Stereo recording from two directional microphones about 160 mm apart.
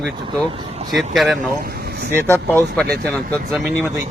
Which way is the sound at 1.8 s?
90° right.